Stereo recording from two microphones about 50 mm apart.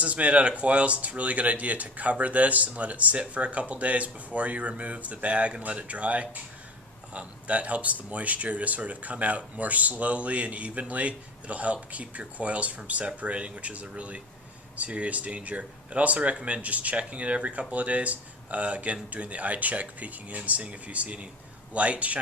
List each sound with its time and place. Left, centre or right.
0.0 s speech: right